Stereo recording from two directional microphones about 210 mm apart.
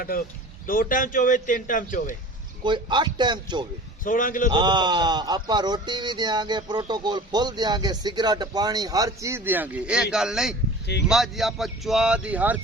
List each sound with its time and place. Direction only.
0.7 s a man's voice: 40° left (ahead or behind)
2.6 s speech: 20° right (ahead or behind)
4.0 s a man's voice: 40° left (ahead or behind)
4.4 s speech: 20° right (ahead or behind)